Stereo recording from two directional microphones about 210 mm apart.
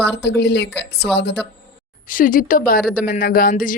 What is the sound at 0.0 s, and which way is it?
Speech, 55° left (ahead or behind).